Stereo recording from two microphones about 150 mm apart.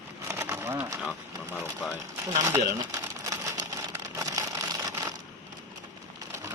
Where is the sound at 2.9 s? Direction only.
20° right (ahead or behind).